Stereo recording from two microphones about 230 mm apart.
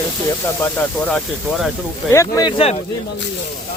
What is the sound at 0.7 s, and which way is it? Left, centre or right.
Speech, centre.